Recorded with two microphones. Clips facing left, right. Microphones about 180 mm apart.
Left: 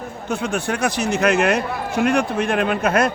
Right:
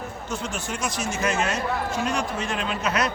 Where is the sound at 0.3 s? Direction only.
60° left (ahead or behind).